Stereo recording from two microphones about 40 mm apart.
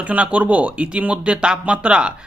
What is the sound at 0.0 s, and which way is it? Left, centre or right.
Speech, right.